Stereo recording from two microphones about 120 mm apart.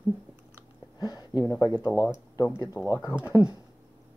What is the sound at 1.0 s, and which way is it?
Speech, 35° left (ahead or behind).